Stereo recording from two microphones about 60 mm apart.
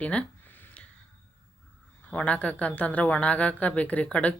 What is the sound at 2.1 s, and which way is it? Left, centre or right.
Speech, left.